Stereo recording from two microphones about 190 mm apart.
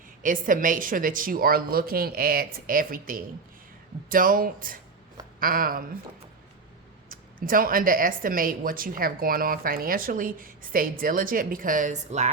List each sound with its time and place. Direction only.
0.2 s speech: 45° right (ahead or behind)
7.1 s speech: 45° right (ahead or behind)